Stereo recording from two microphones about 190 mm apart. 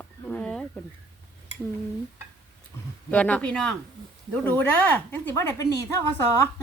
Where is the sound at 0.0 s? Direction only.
5° left (ahead or behind).